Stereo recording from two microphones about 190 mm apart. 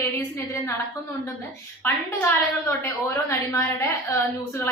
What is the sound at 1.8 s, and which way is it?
A woman's voice, 15° left (ahead or behind).